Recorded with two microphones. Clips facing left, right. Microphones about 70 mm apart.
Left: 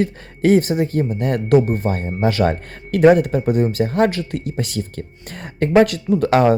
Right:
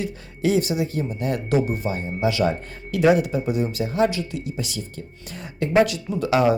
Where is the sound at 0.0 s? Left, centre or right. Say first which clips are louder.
Left 6 dB; left.